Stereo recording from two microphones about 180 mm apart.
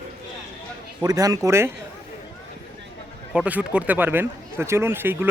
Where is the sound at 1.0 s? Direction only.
20° right (ahead or behind).